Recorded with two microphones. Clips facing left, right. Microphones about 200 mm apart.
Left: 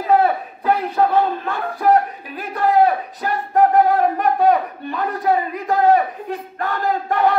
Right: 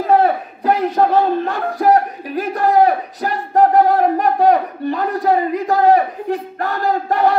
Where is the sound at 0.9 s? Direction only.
40° right (ahead or behind).